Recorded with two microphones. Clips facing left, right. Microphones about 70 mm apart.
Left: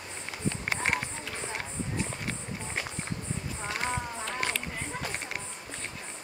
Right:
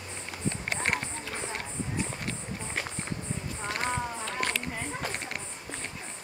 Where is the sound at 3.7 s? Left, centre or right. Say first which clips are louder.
Right 1 dB; centre.